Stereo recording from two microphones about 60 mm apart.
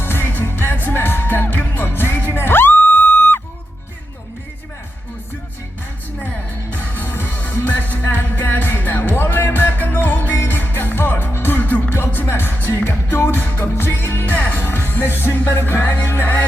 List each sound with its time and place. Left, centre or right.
0.0 s music: left
6.7 s music: left
10.3 s music: left
10.6 s music: left
14.3 s music: left